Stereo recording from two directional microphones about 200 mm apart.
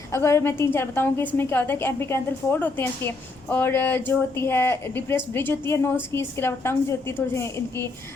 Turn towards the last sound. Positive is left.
turn(degrees=15)  # may be behind; listen again after turning